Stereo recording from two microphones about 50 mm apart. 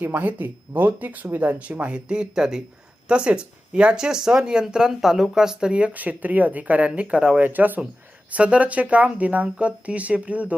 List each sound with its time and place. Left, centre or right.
0.0 s speech: right
7.3 s speech: right
8.3 s speech: right